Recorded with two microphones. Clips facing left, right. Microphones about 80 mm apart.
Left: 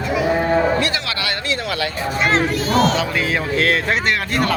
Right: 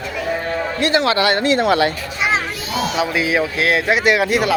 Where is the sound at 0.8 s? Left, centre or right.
Right.